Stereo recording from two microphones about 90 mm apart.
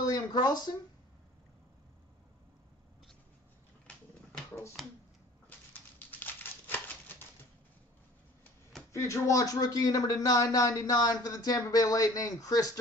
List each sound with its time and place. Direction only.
0.0 s speech: 50° left (ahead or behind)
4.8 s speech: centre (ahead or behind)
5.9 s crumpling: 20° left (ahead or behind)
8.9 s speech: 35° left (ahead or behind)